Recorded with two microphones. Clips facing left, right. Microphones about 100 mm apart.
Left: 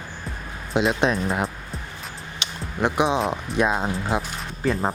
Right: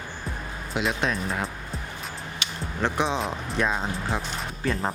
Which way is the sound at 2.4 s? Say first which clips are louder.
Left 2 dB; 20° left (ahead or behind).